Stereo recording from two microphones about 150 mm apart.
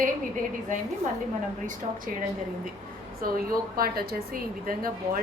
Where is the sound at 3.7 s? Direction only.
85° right.